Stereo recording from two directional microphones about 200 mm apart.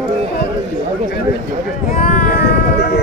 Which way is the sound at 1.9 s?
45° left (ahead or behind).